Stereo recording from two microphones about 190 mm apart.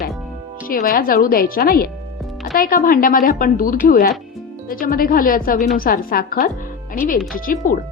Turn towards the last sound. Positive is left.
turn(degrees=45)  # may be behind; listen again after turning